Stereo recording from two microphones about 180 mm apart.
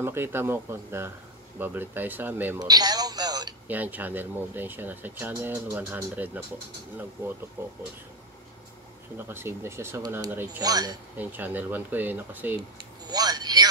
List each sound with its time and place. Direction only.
0.0 s speech: 15° right (ahead or behind)
2.6 s radio: 20° right (ahead or behind)
3.6 s speech: 10° right (ahead or behind)
7.6 s speech: 15° right (ahead or behind)
9.1 s speech: 15° right (ahead or behind)
11.1 s speech: 10° right (ahead or behind)
12.7 s vehicle: 20° right (ahead or behind)